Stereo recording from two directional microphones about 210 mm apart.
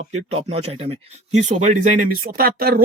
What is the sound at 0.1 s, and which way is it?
Speech, 30° right (ahead or behind).